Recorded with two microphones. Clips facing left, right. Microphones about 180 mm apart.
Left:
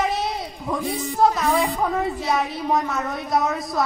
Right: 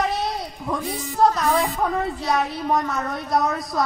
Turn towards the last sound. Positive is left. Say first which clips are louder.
# even
turn(degrees=0)  # may be behind; listen again after turning